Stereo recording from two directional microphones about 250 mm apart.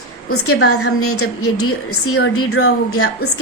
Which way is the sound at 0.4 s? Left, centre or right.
Left.